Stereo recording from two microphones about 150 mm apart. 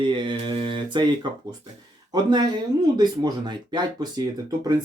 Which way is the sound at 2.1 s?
30° right (ahead or behind).